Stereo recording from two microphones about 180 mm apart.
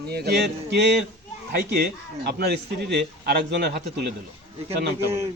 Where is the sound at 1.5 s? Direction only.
55° right (ahead or behind).